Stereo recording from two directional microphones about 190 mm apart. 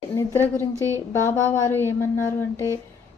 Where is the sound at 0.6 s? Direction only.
10° left (ahead or behind).